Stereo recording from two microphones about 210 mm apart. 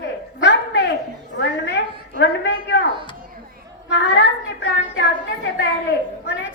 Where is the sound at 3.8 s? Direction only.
55° left (ahead or behind).